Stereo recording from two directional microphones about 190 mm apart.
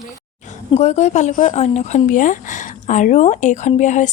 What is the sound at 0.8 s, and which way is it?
Speech, 35° left (ahead or behind).